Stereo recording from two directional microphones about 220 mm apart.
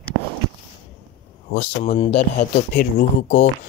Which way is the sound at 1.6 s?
30° left (ahead or behind).